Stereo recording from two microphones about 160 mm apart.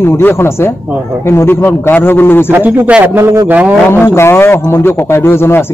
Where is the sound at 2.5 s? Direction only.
10° right (ahead or behind).